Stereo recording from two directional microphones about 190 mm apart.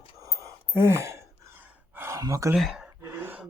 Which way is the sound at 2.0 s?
15° right (ahead or behind).